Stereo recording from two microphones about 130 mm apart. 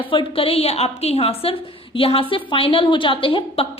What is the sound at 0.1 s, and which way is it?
A woman's voice, 45° left (ahead or behind).